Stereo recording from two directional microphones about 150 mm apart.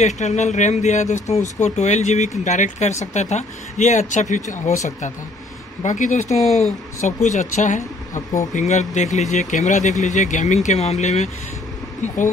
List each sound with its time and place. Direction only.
0.0 s speech: 50° left (ahead or behind)
5.8 s speech: 55° left (ahead or behind)